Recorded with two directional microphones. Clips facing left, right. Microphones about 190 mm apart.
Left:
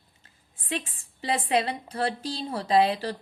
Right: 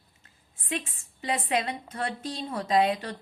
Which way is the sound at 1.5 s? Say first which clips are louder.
Left 3 dB; 30° left (ahead or behind).